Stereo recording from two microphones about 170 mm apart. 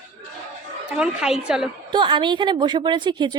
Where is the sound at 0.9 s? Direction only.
5° right (ahead or behind).